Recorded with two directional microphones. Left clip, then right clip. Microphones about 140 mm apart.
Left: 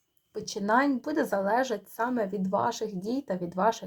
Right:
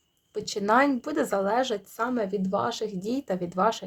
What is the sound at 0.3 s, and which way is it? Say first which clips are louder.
A woman's voice: right 3 dB; 25° right (ahead or behind).